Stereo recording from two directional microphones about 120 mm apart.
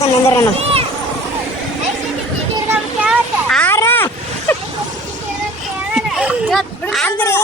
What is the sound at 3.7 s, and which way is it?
Vehicle, 20° left (ahead or behind).